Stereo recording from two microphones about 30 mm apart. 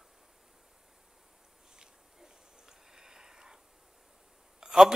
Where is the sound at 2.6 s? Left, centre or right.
Centre.